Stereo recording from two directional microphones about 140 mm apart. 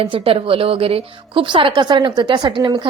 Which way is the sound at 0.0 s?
40° right (ahead or behind).